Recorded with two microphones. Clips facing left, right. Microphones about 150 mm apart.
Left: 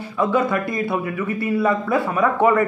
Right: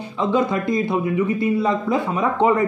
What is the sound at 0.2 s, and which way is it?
A man's voice, 20° right (ahead or behind).